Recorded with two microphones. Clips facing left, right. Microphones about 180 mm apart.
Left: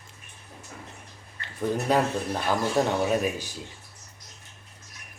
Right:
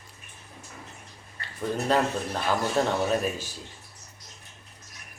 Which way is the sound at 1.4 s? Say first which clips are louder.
Left 2 dB; 15° left (ahead or behind).